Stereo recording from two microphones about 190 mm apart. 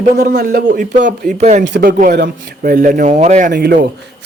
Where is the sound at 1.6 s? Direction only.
65° right (ahead or behind).